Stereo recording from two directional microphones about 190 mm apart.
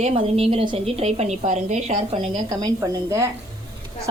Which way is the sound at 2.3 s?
20° right (ahead or behind).